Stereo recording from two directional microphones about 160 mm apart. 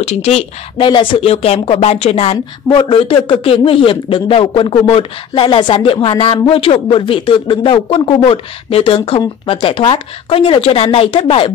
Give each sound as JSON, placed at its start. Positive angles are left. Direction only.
{"t": 0.0, "sound": "a man's voice", "side_deg": 40}